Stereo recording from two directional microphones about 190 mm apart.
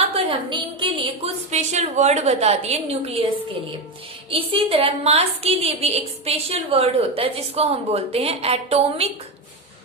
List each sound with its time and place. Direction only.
0.1 s a woman's voice: 25° right (ahead or behind)
4.3 s a woman's voice: 30° right (ahead or behind)